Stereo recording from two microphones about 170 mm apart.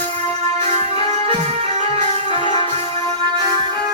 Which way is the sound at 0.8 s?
40° right (ahead or behind).